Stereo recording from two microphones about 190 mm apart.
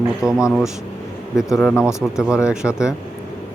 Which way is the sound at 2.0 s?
5° right (ahead or behind).